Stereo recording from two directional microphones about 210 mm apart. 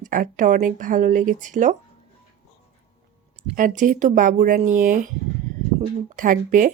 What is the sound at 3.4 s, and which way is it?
Speech, 40° right (ahead or behind).